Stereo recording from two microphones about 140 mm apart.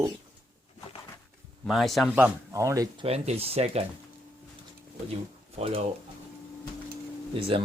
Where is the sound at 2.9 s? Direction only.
45° right (ahead or behind).